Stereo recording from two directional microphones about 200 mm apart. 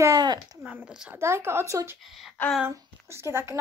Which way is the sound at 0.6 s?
5° right (ahead or behind).